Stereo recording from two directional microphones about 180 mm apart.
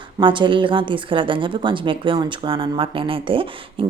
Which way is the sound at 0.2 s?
25° right (ahead or behind).